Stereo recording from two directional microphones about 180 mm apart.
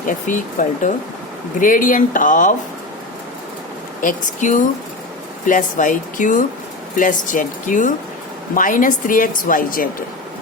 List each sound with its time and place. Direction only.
0.1 s a woman's voice: 45° left (ahead or behind)
4.0 s a woman's voice: 45° left (ahead or behind)